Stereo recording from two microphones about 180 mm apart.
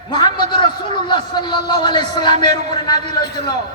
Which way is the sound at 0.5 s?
25° left (ahead or behind).